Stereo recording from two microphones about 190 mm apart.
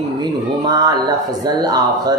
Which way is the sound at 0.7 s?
20° right (ahead or behind).